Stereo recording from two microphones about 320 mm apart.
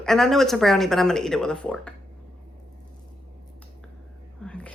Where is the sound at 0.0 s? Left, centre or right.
Centre.